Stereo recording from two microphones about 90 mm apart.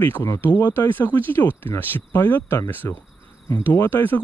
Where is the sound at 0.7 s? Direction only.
20° left (ahead or behind).